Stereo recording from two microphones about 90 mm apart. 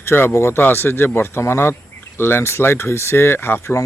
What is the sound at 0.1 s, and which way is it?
Speech, 25° left (ahead or behind).